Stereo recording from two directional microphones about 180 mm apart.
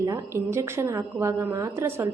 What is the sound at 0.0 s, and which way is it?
A woman's voice, 15° right (ahead or behind).